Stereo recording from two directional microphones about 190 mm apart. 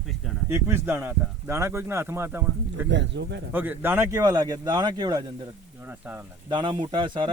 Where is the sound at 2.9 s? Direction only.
70° right (ahead or behind).